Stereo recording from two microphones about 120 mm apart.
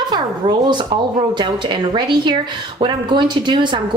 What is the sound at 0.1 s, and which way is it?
Speech, 40° right (ahead or behind).